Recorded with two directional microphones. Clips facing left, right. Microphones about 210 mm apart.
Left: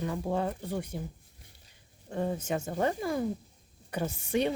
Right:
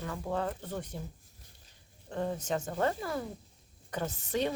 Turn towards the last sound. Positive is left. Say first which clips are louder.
# left 3 dB
turn(degrees=10)  # may be behind; listen again after turning